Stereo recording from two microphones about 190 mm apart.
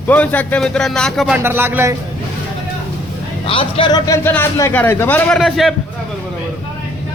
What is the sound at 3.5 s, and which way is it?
Speech, 30° left (ahead or behind).